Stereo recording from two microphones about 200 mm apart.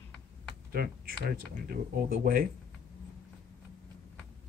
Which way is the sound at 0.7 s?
50° right (ahead or behind).